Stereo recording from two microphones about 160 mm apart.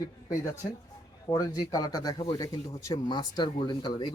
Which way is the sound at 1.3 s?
20° left (ahead or behind).